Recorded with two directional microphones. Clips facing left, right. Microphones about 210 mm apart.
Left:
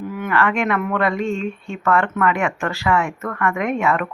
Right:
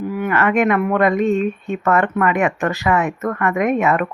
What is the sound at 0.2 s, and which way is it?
Speech, 15° right (ahead or behind).